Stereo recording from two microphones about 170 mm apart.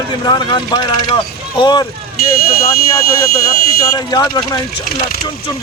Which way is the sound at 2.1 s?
60° left (ahead or behind).